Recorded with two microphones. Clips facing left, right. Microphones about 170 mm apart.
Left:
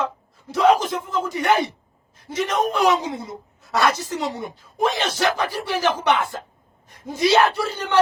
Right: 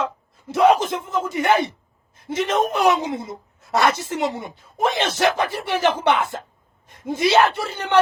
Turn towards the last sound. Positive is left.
turn(degrees=-25)  # may be behind; listen again after turning